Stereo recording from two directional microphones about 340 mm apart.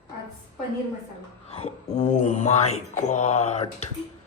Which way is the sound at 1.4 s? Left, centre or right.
Centre.